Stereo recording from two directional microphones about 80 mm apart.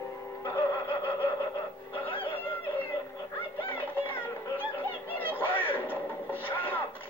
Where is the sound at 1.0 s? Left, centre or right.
Left.